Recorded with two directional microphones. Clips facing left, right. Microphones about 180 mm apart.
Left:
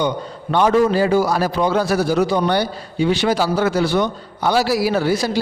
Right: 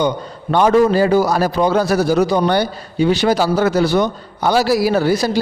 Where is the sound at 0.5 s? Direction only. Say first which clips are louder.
Right 3 dB; 40° right (ahead or behind).